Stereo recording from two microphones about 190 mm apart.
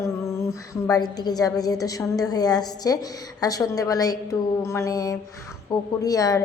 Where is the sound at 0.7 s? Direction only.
20° left (ahead or behind).